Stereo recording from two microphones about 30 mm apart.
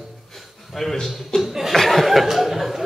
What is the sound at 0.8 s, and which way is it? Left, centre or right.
Speech, centre.